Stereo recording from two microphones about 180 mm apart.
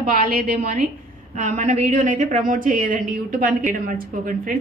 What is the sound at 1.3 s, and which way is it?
A woman's voice, 45° right (ahead or behind).